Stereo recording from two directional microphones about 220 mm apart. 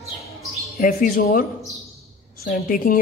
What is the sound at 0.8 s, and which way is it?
Speech, 40° left (ahead or behind).